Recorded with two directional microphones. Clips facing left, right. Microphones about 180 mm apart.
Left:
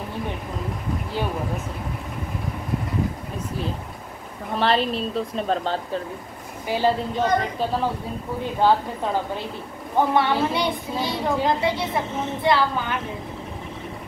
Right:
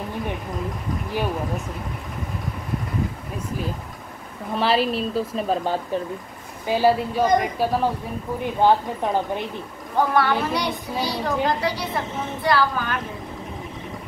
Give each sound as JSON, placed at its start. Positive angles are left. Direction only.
{"t": 4.6, "sound": "a woman's voice", "side_deg": -5}
{"t": 9.9, "sound": "a child's voice", "side_deg": 25}